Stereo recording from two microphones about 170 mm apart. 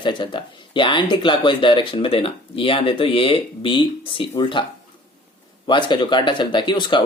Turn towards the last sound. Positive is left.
turn(degrees=25)  # may be behind; listen again after turning